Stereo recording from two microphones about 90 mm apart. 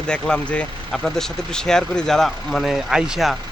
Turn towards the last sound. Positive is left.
turn(degrees=-5)  # may be behind; listen again after turning